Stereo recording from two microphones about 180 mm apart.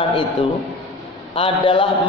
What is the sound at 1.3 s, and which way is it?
Speech, 30° left (ahead or behind).